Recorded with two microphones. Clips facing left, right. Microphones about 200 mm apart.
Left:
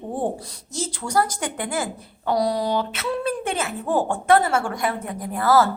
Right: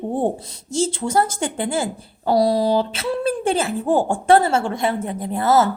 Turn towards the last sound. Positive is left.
turn(degrees=-25)  # may be behind; listen again after turning